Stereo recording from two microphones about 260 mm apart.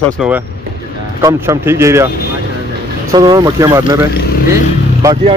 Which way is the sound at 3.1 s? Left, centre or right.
Centre.